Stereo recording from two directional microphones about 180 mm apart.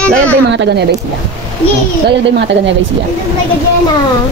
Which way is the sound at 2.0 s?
70° right (ahead or behind).